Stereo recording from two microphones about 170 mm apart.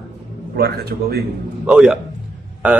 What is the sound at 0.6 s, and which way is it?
Speech, 65° right (ahead or behind).